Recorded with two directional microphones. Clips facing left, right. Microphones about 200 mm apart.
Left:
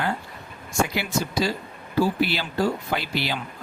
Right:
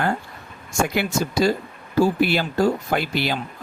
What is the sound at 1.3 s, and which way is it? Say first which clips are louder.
Speech: right 5 dB; 50° right (ahead or behind).